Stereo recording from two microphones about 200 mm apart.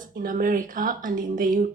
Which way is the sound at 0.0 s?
45° right (ahead or behind).